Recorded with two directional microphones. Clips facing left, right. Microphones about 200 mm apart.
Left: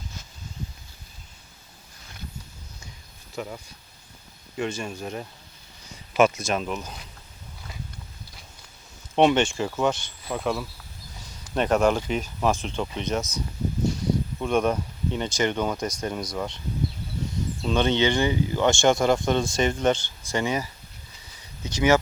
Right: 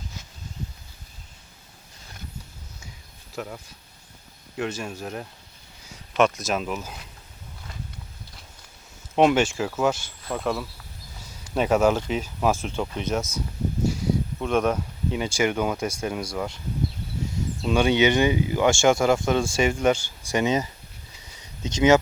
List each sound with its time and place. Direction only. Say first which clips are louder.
3.3 s speech: even; centre (ahead or behind)
9.1 s speech: even; 5° right (ahead or behind)
14.3 s speech: even; centre (ahead or behind)
17.6 s speech: right 2 dB; 10° right (ahead or behind)